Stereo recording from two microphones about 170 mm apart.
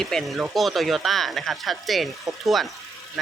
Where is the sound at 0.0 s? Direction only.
Centre (ahead or behind).